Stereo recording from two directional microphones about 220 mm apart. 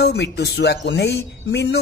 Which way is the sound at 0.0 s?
45° left (ahead or behind).